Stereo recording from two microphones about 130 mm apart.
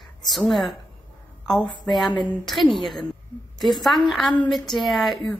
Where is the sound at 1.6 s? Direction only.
35° left (ahead or behind).